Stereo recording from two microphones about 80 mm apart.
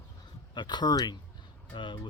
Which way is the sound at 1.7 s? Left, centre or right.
Left.